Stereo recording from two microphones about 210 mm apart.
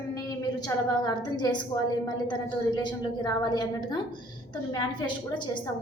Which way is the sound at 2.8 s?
20° left (ahead or behind).